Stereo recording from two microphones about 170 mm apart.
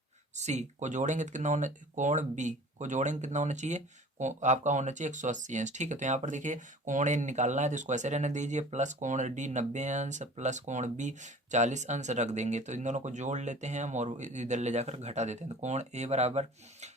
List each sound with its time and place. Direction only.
0.3 s speech: 40° right (ahead or behind)